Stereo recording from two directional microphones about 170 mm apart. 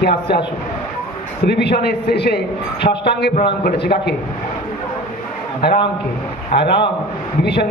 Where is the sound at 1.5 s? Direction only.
80° left.